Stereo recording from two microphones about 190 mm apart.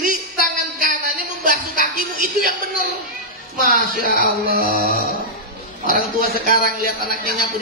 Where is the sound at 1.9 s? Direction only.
50° right (ahead or behind).